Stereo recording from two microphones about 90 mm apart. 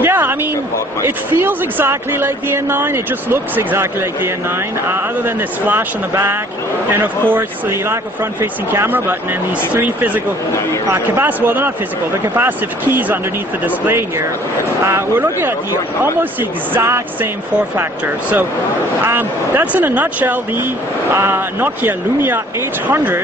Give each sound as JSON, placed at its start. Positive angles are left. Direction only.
{"t": 0.0, "sound": "a sound", "side_deg": -25}
{"t": 1.0, "sound": "speech", "side_deg": -25}
{"t": 7.0, "sound": "speech", "side_deg": -20}